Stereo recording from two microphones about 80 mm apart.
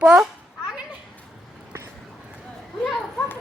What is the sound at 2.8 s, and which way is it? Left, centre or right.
Children playing, centre.